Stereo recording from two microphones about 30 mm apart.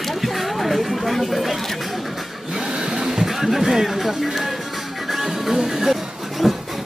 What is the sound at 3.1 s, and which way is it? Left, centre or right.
Music, centre.